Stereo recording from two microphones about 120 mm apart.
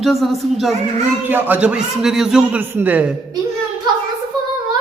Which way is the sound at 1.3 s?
15° right (ahead or behind).